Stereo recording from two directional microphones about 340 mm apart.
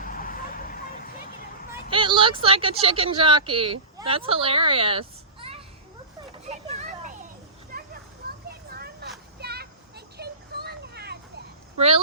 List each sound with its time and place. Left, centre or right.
0.0 s vehicle: left
1.9 s speech: centre
6.5 s a sound: right